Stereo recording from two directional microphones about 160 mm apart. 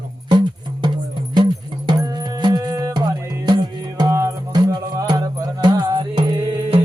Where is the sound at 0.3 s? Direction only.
30° right (ahead or behind).